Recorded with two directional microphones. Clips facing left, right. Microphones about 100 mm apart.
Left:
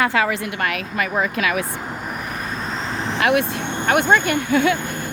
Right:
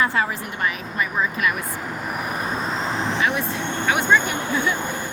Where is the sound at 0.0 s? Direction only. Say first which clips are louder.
Left 3 dB; 90° left.